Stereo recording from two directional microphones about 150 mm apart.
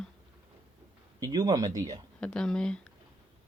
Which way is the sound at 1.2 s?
25° right (ahead or behind).